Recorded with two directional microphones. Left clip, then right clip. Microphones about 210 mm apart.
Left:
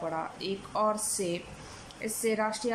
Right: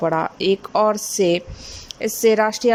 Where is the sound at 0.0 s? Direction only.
50° right (ahead or behind).